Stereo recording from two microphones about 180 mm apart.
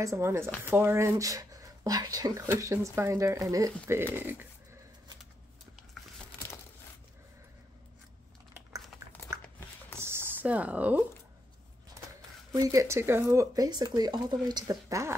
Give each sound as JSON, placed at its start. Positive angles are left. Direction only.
{"t": 0.0, "sound": "speech", "side_deg": -15}
{"t": 9.3, "sound": "a sound", "side_deg": -15}
{"t": 12.5, "sound": "speech", "side_deg": -20}